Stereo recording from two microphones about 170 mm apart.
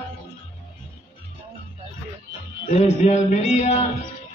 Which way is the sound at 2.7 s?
40° left (ahead or behind).